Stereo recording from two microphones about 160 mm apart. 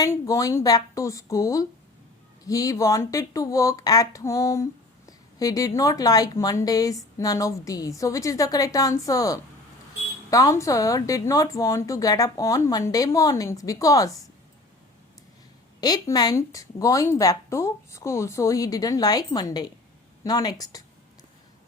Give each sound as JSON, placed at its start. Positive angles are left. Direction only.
{"t": 0.0, "sound": "speech", "side_deg": 20}
{"t": 15.8, "sound": "speech", "side_deg": 25}